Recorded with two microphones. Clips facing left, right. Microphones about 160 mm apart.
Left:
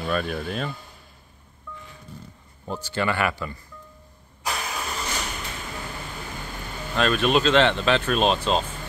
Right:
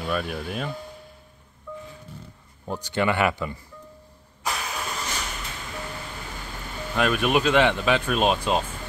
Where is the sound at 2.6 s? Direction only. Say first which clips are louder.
Right 2 dB; 15° right (ahead or behind).